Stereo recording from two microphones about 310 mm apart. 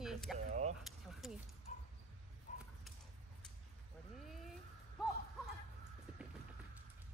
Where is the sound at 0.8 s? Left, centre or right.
Centre.